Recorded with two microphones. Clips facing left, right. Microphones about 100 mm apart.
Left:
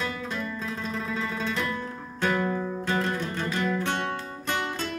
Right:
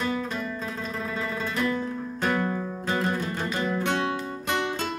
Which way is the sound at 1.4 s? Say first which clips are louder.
Right 5 dB; 5° right (ahead or behind).